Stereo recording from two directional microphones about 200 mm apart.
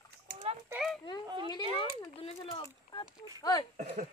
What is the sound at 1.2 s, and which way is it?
Speech, 20° right (ahead or behind).